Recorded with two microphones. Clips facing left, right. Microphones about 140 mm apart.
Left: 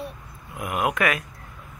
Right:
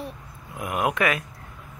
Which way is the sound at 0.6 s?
5° left (ahead or behind).